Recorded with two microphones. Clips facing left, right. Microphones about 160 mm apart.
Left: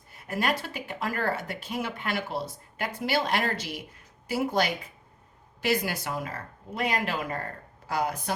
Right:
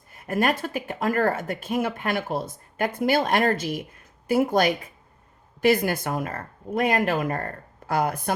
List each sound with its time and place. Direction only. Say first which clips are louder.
0.1 s speech: right 5 dB; 50° right (ahead or behind)